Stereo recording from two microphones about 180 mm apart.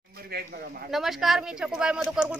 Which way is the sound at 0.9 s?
Centre (ahead or behind).